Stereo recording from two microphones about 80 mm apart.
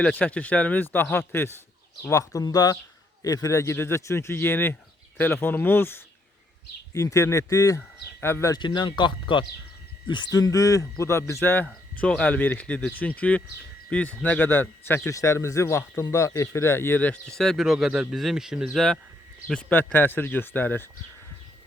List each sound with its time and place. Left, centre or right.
0.0 s speech: centre
2.0 s speech: left
6.9 s speech: left
8.5 s speech: left
10.1 s speech: left
10.3 s speech: left
11.6 s speech: centre
15.0 s speech: left
17.2 s speech: centre
19.5 s speech: centre
19.9 s speech: left